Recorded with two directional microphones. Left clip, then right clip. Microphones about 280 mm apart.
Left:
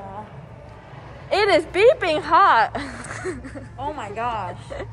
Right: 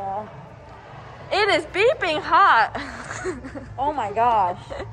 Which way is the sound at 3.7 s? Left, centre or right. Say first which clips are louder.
Right 7 dB; right.